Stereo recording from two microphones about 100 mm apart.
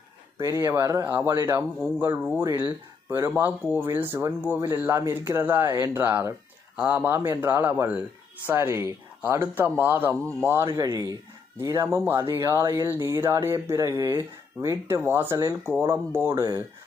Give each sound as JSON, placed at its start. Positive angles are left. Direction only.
{"t": 0.4, "sound": "speech", "side_deg": -30}
{"t": 1.0, "sound": "speech", "side_deg": -20}